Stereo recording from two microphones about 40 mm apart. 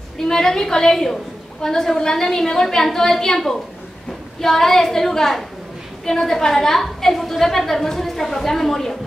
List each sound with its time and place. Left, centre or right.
0.2 s a woman's voice: centre